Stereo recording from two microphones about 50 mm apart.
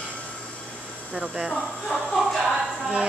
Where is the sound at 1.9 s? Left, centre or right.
Centre.